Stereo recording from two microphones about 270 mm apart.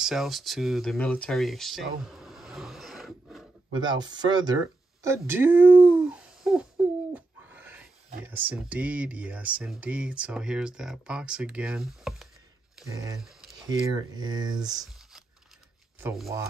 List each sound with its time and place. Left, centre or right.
0.0 s speech: centre
3.7 s speech: centre
5.0 s a sound: centre
7.2 s owl: centre
8.3 s speech: centre
13.7 s speech: centre
16.0 s speech: centre